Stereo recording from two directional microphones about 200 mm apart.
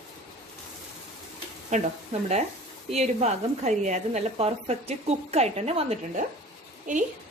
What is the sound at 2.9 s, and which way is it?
Speech, 35° right (ahead or behind).